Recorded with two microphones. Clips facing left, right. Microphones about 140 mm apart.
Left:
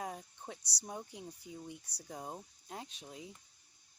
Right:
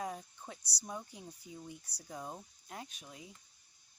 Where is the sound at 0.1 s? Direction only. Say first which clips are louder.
Right 1 dB; 20° left (ahead or behind).